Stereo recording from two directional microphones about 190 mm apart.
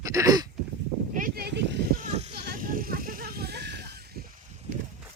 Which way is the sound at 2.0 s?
45° right (ahead or behind).